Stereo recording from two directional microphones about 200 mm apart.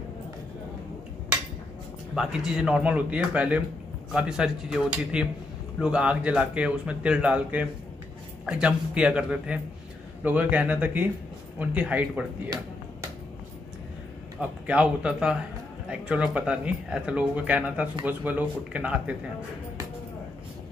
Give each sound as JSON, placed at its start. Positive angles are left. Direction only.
{"t": 2.1, "sound": "speech", "side_deg": -5}
{"t": 14.7, "sound": "speech", "side_deg": -5}